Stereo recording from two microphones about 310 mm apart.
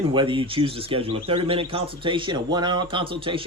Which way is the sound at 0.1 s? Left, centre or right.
Centre.